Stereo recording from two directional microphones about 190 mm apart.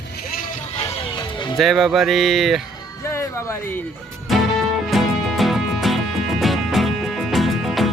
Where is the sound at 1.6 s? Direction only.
Centre (ahead or behind).